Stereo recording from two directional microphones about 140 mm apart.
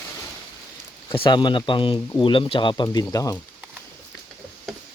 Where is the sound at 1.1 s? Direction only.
30° left (ahead or behind).